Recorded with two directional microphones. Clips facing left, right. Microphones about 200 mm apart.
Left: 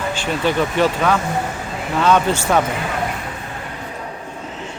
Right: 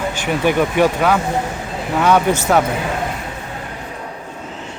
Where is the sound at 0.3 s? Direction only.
15° right (ahead or behind).